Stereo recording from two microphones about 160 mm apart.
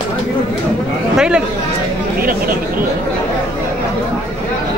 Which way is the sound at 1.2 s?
5° right (ahead or behind).